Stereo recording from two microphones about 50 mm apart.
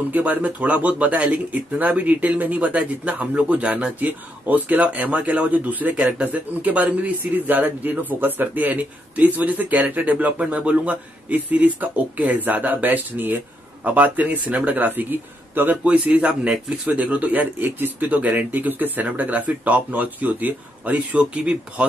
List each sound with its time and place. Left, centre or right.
0.1 s speech: right
15.8 s a man's voice: right